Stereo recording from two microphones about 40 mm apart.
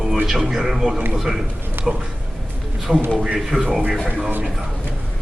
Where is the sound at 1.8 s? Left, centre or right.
Right.